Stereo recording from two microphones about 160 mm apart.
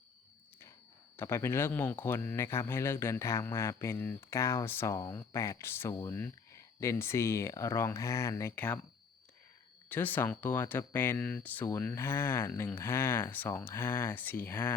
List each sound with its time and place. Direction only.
1.1 s speech: 15° left (ahead or behind)
9.9 s speech: 10° left (ahead or behind)